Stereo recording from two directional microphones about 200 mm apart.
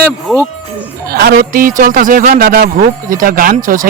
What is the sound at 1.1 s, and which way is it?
A man's voice, 50° right (ahead or behind).